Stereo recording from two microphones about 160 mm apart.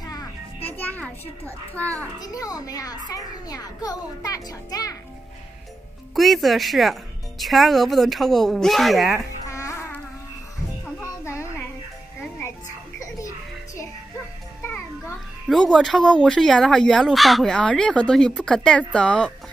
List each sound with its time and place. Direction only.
0.7 s music: 10° left (ahead or behind)
2.1 s a child's voice: 20° left (ahead or behind)
6.1 s speech: centre (ahead or behind)
9.5 s music: 20° left (ahead or behind)
14.6 s music: 15° left (ahead or behind)
15.4 s speech: centre (ahead or behind)